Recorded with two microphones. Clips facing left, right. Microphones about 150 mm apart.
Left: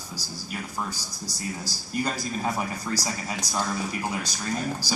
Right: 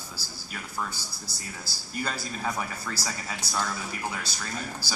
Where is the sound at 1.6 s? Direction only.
15° left (ahead or behind).